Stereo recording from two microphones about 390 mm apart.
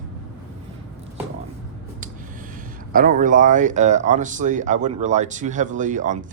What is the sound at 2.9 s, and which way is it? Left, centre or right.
Speech, right.